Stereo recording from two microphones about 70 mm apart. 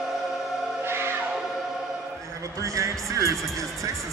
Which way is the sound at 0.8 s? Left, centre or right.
Right.